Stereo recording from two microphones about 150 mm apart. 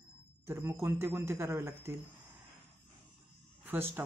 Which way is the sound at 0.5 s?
15° right (ahead or behind).